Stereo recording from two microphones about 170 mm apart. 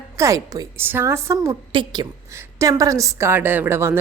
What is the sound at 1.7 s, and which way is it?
Speech, 30° right (ahead or behind).